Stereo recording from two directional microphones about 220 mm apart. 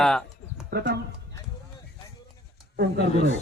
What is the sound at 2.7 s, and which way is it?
Speech, 50° right (ahead or behind).